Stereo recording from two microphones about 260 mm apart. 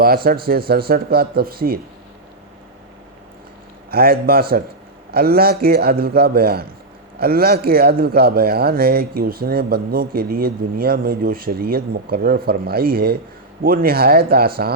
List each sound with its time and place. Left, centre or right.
0.0 s speech: right
3.9 s speech: right